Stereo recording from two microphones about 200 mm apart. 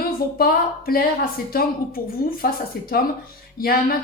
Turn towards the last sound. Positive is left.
turn(degrees=45)  # may be behind; listen again after turning